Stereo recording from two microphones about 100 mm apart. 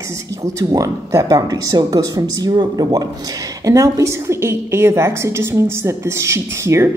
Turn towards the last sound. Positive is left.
turn(degrees=-25)  # may be behind; listen again after turning